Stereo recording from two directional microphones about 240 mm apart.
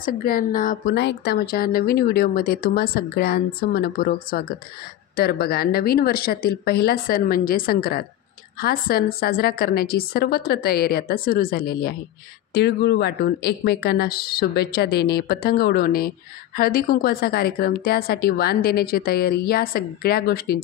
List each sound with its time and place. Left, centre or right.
0.0 s speech: left